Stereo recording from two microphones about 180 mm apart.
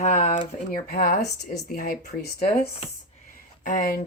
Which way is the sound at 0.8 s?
55° left (ahead or behind).